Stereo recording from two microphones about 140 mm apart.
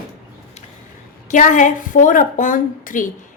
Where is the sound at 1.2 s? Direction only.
65° left (ahead or behind).